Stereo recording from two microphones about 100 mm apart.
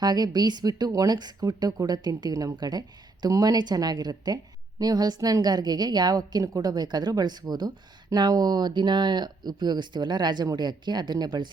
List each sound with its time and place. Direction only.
0.0 s a woman's voice: 45° right (ahead or behind)